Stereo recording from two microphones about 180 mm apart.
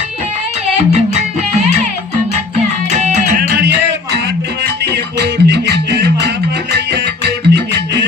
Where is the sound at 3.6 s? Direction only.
65° right (ahead or behind).